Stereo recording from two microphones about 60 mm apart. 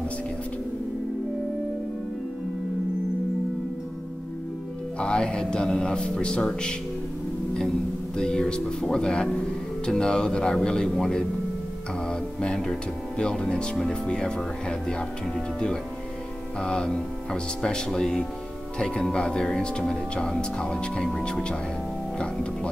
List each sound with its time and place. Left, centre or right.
4.9 s speech: centre
8.2 s speech: centre